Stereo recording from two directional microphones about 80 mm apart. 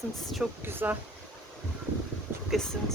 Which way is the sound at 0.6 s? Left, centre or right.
Right.